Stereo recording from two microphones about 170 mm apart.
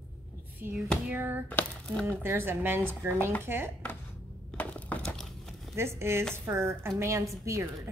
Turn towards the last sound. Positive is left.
turn(degrees=-20)  # may be behind; listen again after turning